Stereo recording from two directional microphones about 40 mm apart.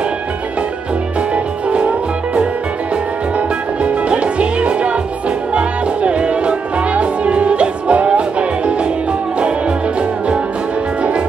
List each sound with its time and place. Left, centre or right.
1.3 s music: right
9.9 s music: right